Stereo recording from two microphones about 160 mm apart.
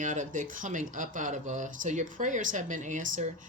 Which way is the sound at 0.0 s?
55° right (ahead or behind).